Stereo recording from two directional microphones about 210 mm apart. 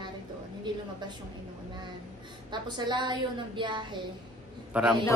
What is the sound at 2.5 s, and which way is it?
A woman's voice, 20° right (ahead or behind).